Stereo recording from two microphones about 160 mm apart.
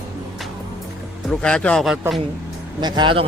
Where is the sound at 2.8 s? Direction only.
30° right (ahead or behind).